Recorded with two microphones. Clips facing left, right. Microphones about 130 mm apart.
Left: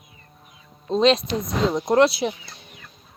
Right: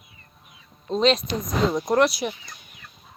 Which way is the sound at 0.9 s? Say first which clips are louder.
Left 3 dB; 35° left (ahead or behind).